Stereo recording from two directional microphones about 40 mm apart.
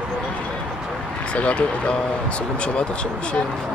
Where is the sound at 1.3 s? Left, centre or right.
Left.